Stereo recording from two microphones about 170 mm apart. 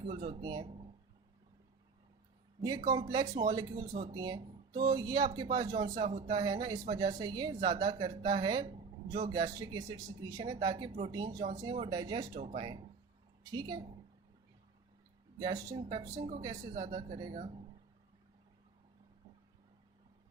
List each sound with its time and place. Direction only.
0.3 s speech: 25° right (ahead or behind)
2.6 s speech: 20° right (ahead or behind)
12.4 s speech: 35° right (ahead or behind)
15.4 s speech: 25° right (ahead or behind)